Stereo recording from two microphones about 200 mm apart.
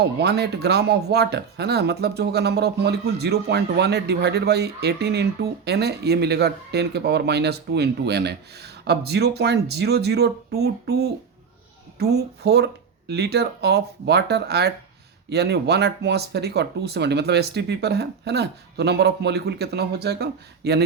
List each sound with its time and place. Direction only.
0.0 s speech: 55° right (ahead or behind)